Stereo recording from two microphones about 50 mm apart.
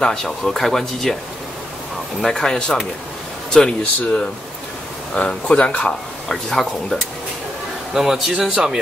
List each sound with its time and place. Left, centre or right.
0.0 s speech: centre
2.2 s speech: centre
6.2 s speech: centre
7.9 s a man's voice: centre